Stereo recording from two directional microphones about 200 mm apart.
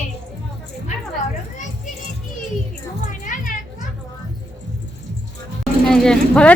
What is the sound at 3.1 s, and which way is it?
Children playing, 40° left (ahead or behind).